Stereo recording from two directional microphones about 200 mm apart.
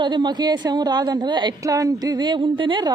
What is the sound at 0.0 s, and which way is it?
A woman's voice, 20° right (ahead or behind).